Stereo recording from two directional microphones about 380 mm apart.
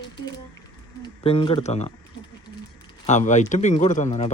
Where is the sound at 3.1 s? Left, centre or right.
Centre.